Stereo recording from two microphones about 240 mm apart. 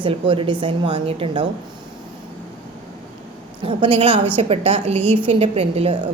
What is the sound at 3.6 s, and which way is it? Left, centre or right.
A woman's voice, right.